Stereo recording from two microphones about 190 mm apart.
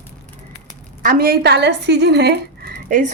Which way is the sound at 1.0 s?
50° right (ahead or behind).